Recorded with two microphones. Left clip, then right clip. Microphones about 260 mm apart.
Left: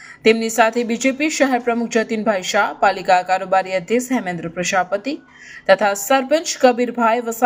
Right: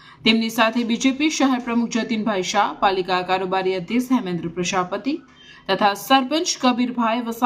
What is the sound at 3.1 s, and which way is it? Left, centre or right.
Speech, right.